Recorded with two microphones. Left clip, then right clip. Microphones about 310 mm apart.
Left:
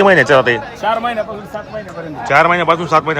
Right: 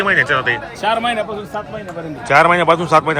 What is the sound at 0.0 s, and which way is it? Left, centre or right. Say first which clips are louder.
Speech: left 5 dB; centre.